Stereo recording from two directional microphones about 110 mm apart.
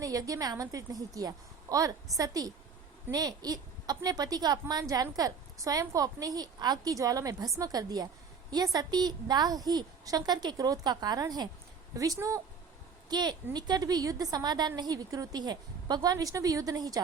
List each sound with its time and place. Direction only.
0.0 s a woman's voice: 35° right (ahead or behind)